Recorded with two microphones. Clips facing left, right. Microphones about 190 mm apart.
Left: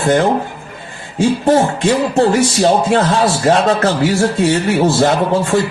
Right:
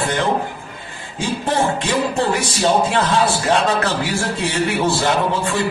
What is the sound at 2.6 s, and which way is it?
A man's voice, 35° left (ahead or behind).